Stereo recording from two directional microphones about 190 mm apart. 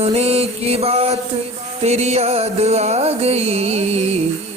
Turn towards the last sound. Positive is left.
turn(degrees=-35)  # may be behind; listen again after turning